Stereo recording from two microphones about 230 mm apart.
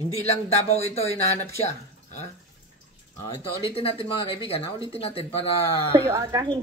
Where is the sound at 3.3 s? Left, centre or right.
Left.